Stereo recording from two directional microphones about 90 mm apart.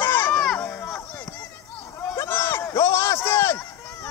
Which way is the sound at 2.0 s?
30° left (ahead or behind).